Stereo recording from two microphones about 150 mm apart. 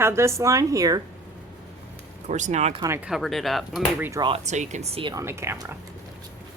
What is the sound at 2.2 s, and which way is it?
Speech, 50° right (ahead or behind).